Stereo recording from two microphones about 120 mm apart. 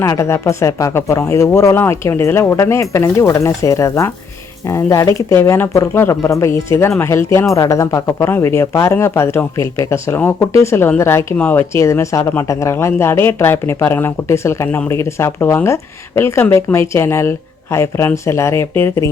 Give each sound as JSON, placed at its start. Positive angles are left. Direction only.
{"t": 0.0, "sound": "speech", "side_deg": 25}